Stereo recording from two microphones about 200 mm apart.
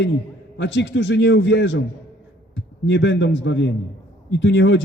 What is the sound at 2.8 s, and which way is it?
A man's voice, 65° left (ahead or behind).